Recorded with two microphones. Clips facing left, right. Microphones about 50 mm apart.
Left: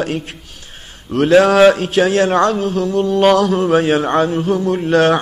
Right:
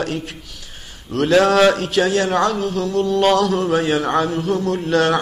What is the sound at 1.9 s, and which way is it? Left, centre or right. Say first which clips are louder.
A man's voice: left 4 dB; left.